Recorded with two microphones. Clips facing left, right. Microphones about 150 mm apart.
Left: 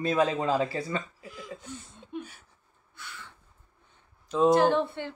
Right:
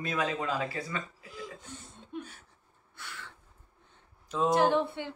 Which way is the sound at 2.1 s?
5° left (ahead or behind).